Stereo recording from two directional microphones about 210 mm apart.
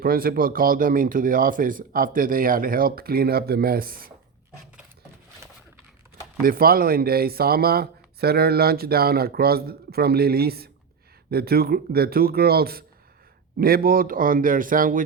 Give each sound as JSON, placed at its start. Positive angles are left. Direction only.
{"t": 0.0, "sound": "speech", "side_deg": -45}
{"t": 6.4, "sound": "a man's voice", "side_deg": -45}